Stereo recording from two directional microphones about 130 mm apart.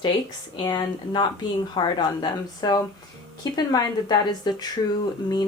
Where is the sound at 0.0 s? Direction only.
35° left (ahead or behind).